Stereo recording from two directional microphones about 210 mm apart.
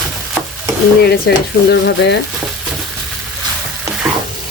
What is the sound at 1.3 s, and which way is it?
Speech, 50° left (ahead or behind).